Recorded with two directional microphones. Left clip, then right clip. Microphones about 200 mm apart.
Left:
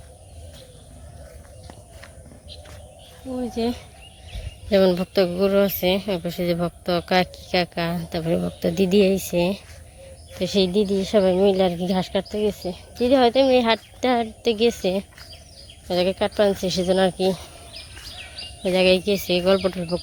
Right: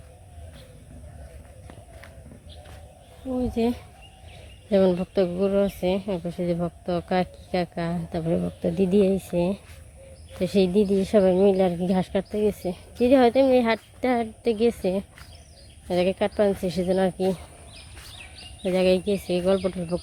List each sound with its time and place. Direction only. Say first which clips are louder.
3.5 s speech: left 1 dB; 20° right (ahead or behind)
4.7 s a woman's voice: left 3 dB; 5° right (ahead or behind)
10.4 s a woman's voice: left 1 dB; 15° right (ahead or behind)
18.6 s a woman's voice: left 3 dB; 5° right (ahead or behind)